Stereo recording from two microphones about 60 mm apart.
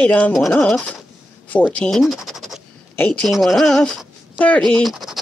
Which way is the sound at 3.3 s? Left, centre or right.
Centre.